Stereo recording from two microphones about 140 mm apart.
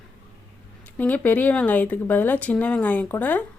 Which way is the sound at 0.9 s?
10° left (ahead or behind).